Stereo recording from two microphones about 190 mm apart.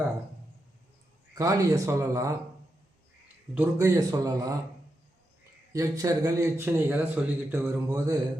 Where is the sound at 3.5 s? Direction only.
10° right (ahead or behind).